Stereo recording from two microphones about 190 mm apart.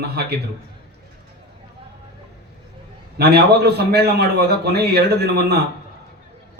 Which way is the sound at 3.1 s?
60° right (ahead or behind).